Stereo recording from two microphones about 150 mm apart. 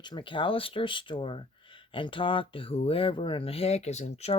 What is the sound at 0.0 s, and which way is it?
Speech, 30° left (ahead or behind).